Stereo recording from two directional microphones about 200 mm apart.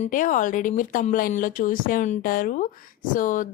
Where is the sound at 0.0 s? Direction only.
40° left (ahead or behind).